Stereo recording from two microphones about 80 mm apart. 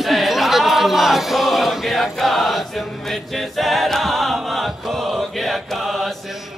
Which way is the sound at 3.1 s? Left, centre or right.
Centre.